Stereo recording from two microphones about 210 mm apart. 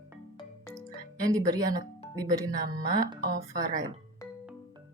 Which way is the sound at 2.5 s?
40° right (ahead or behind).